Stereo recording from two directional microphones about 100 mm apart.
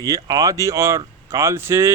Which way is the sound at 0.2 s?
40° right (ahead or behind).